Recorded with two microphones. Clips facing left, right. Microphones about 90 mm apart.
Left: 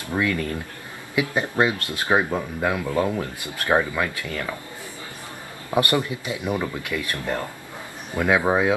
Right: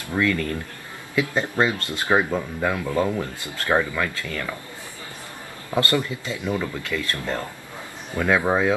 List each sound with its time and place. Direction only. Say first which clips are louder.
0.1 s speech: right 1 dB; 15° left (ahead or behind)
5.7 s speech: left 1 dB; 20° left (ahead or behind)